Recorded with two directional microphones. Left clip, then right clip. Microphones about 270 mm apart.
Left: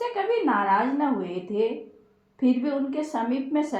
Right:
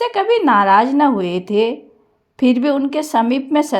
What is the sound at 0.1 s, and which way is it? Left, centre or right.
A woman's voice, right.